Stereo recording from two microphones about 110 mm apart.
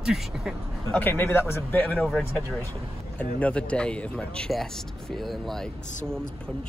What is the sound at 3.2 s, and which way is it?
Speech, 15° left (ahead or behind).